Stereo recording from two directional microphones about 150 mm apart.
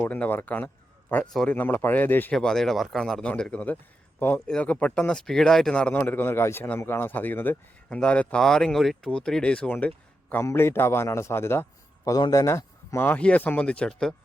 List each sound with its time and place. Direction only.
0.0 s speech: 10° left (ahead or behind)